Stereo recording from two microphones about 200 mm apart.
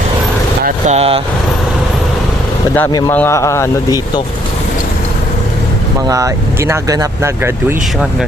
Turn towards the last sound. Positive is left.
turn(degrees=-15)  # may be behind; listen again after turning